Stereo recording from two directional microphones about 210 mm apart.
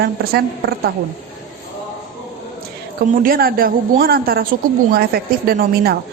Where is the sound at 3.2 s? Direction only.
45° right (ahead or behind).